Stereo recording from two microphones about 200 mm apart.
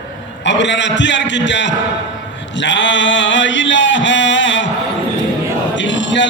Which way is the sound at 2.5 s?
65° left (ahead or behind).